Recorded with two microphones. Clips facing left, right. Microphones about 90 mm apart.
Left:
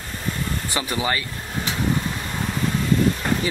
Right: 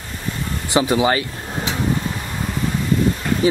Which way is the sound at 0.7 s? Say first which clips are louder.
Right 9 dB; 20° right (ahead or behind).